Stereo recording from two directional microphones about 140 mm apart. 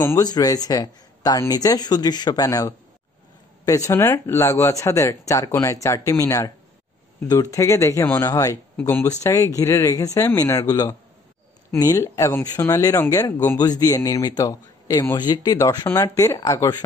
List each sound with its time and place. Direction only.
0.0 s speech: 25° left (ahead or behind)
7.5 s speech: 25° left (ahead or behind)